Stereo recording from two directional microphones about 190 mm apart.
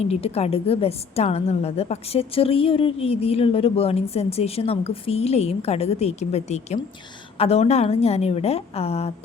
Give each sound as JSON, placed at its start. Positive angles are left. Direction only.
{"t": 0.0, "sound": "a woman's voice", "side_deg": 35}